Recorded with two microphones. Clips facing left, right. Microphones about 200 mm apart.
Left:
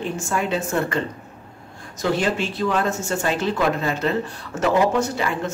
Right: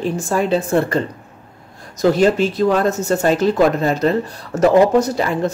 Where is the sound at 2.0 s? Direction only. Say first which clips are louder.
Right 8 dB; 40° right (ahead or behind).